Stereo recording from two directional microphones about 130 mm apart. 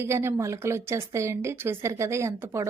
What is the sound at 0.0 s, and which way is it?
Speech, 20° right (ahead or behind).